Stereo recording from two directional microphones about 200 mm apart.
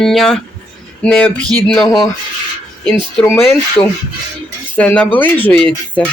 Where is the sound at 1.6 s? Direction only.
Centre (ahead or behind).